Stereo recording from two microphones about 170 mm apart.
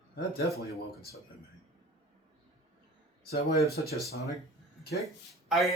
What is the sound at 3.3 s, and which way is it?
Speech, 65° left (ahead or behind).